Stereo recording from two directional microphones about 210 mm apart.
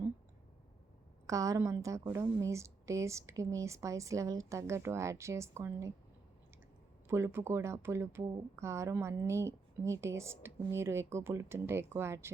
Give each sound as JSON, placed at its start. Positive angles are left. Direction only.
{"t": 1.3, "sound": "speech", "side_deg": -15}
{"t": 7.1, "sound": "speech", "side_deg": -10}